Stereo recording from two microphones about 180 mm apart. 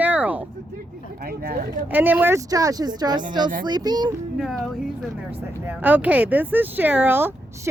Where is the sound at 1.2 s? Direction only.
55° right (ahead or behind).